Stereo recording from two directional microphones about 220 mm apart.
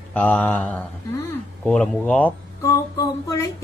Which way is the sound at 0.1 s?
5° left (ahead or behind).